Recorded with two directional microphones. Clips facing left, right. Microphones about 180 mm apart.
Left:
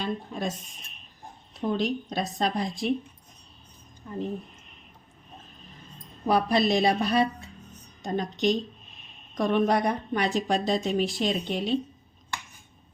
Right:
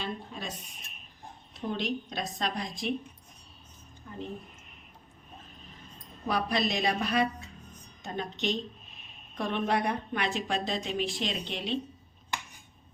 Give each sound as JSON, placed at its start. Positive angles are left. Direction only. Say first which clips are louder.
{"t": 0.0, "sound": "a woman's voice", "louder": "left 7 dB", "side_deg": 45}
{"t": 1.7, "sound": "a woman's voice", "louder": "left 5 dB", "side_deg": 35}
{"t": 6.2, "sound": "a woman's voice", "louder": "left 6 dB", "side_deg": 35}